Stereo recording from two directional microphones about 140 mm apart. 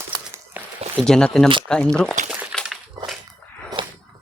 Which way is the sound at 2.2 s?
65° right (ahead or behind).